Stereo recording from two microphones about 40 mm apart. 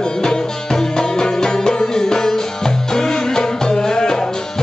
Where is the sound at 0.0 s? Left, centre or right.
Centre.